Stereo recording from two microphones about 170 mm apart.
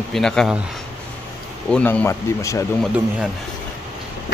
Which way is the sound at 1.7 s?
10° left (ahead or behind).